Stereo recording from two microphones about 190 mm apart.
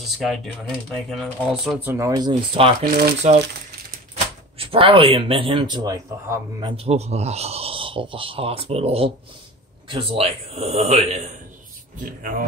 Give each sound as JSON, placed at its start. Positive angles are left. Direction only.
{"t": 0.2, "sound": "speech", "side_deg": 0}
{"t": 1.9, "sound": "speech", "side_deg": -15}
{"t": 3.2, "sound": "speech", "side_deg": -40}
{"t": 4.6, "sound": "speech", "side_deg": -30}
{"t": 6.8, "sound": "speech", "side_deg": -35}
{"t": 12.0, "sound": "speech", "side_deg": -45}